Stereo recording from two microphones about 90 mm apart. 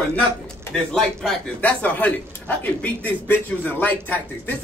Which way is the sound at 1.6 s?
15° left (ahead or behind).